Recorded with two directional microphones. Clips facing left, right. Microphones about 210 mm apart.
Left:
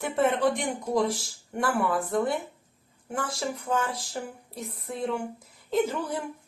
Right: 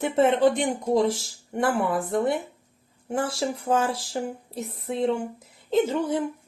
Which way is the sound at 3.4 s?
30° right (ahead or behind).